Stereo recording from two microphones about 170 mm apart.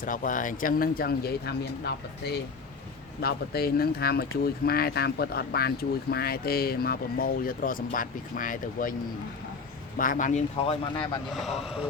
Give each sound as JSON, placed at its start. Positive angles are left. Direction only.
{"t": 0.0, "sound": "speech", "side_deg": 50}
{"t": 10.0, "sound": "speech", "side_deg": 50}
{"t": 10.7, "sound": "speech", "side_deg": 30}
{"t": 11.3, "sound": "speech", "side_deg": 0}